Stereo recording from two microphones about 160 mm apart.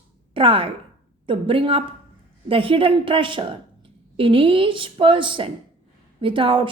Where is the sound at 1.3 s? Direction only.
30° right (ahead or behind).